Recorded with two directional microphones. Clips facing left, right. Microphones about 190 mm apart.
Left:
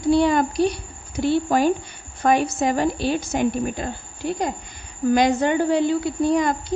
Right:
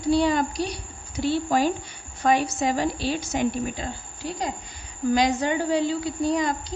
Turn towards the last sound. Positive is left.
turn(degrees=55)  # may be behind; listen again after turning